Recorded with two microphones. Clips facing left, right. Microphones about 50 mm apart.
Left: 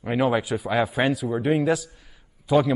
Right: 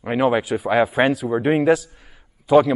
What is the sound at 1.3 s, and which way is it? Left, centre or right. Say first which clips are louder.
Speech: right 4 dB; right.